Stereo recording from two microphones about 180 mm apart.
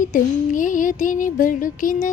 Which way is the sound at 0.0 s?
45° left (ahead or behind).